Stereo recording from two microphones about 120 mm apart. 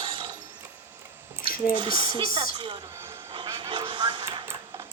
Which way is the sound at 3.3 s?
40° right (ahead or behind).